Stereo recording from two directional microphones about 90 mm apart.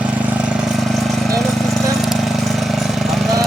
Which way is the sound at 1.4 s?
Centre (ahead or behind).